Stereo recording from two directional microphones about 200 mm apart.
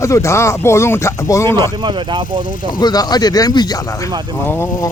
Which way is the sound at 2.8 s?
20° left (ahead or behind).